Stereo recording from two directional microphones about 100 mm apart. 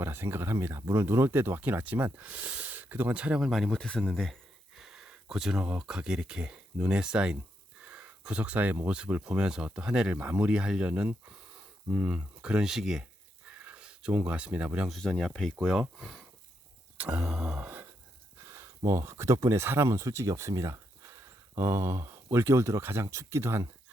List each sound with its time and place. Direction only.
0.0 s speech: 25° right (ahead or behind)
14.8 s speech: 5° left (ahead or behind)
18.4 s a sound: 30° right (ahead or behind)
18.9 s speech: 30° right (ahead or behind)